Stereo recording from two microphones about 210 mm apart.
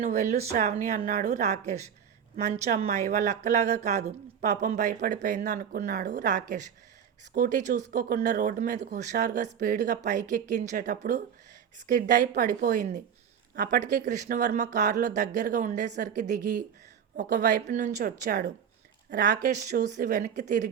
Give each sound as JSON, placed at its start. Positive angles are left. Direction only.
{"t": 0.0, "sound": "a woman's voice", "side_deg": -35}